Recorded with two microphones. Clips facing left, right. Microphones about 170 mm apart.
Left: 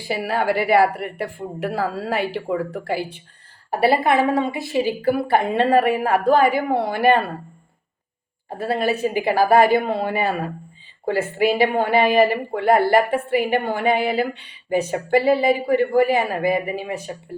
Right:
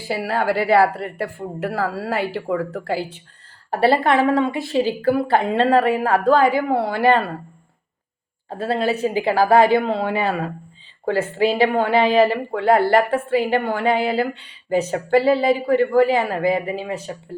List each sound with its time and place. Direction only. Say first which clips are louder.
0.0 s speech: even; 20° left (ahead or behind)
8.4 s speech: right 1 dB; 10° left (ahead or behind)